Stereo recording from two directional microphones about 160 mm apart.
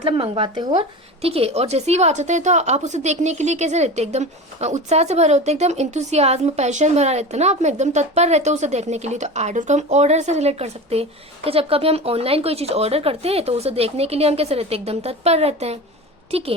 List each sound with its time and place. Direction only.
0.0 s a woman's voice: 35° right (ahead or behind)